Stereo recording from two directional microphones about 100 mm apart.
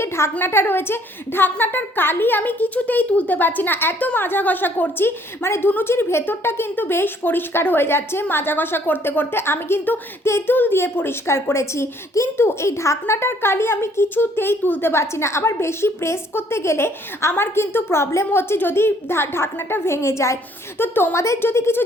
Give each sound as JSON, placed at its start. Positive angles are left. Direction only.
{"t": 0.0, "sound": "a woman's voice", "side_deg": 25}